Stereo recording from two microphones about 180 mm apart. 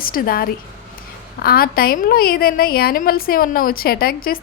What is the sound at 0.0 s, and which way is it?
Speech, 55° left (ahead or behind).